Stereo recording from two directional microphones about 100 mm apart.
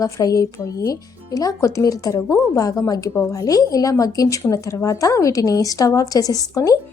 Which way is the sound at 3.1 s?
25° left (ahead or behind).